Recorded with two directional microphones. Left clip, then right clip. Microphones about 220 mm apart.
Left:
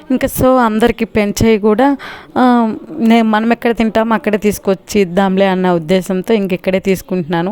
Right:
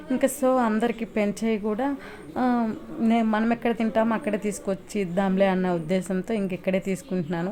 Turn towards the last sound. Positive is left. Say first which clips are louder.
# left 13 dB
turn(degrees=40)  # may be behind; listen again after turning